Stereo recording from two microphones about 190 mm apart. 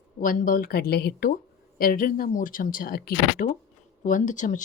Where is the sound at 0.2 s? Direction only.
45° left (ahead or behind).